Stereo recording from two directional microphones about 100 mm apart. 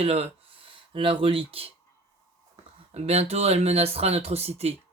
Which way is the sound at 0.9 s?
60° right (ahead or behind).